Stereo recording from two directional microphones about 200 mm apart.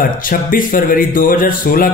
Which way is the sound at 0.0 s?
45° left (ahead or behind).